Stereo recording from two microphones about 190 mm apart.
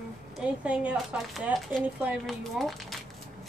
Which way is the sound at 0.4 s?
5° right (ahead or behind).